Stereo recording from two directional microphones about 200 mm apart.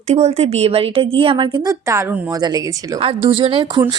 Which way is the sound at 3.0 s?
25° right (ahead or behind).